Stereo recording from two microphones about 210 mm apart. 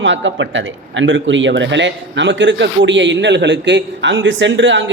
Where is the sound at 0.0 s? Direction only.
60° right (ahead or behind).